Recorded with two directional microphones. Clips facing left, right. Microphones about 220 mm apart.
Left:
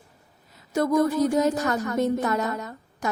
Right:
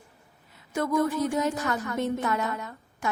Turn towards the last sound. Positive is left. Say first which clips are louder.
# left 4 dB
turn(degrees=40)  # may be behind; listen again after turning